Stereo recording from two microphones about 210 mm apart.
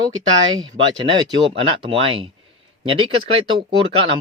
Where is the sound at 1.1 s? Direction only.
25° right (ahead or behind).